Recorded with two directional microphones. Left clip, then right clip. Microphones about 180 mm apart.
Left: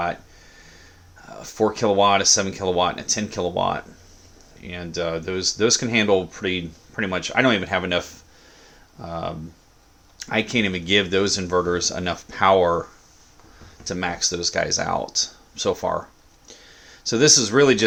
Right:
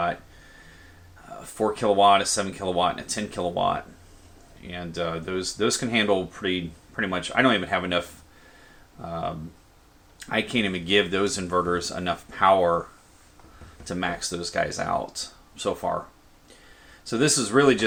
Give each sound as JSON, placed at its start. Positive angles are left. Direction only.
{"t": 1.4, "sound": "speech", "side_deg": 45}
{"t": 13.8, "sound": "speech", "side_deg": 35}
{"t": 17.1, "sound": "speech", "side_deg": 40}